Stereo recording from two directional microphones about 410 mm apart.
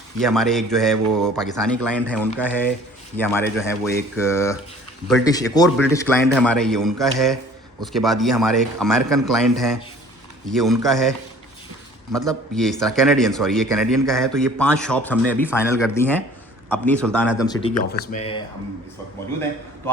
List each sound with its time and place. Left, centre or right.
0.2 s a man's voice: centre
12.1 s a man's voice: centre
17.9 s speech: centre